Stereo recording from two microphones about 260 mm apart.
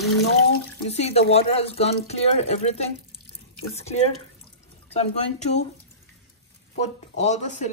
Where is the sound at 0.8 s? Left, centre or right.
Left.